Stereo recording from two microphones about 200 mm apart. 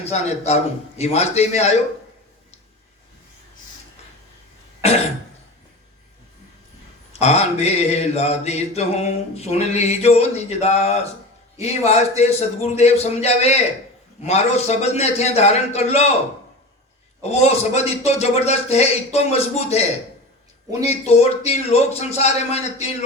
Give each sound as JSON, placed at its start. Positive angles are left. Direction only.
{"t": 0.0, "sound": "mantra", "side_deg": 35}
{"t": 4.8, "sound": "cough", "side_deg": 30}
{"t": 7.1, "sound": "mantra", "side_deg": 35}
{"t": 17.4, "sound": "mantra", "side_deg": 35}
{"t": 21.1, "sound": "mantra", "side_deg": 30}